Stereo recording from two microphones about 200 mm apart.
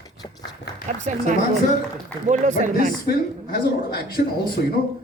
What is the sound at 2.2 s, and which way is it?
Speech, 35° right (ahead or behind).